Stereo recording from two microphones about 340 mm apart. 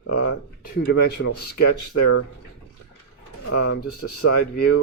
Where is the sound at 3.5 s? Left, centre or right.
Left.